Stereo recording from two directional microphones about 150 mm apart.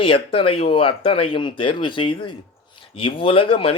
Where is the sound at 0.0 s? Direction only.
35° left (ahead or behind).